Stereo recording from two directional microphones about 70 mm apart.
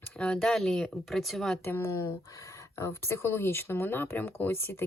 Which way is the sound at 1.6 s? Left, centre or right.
Left.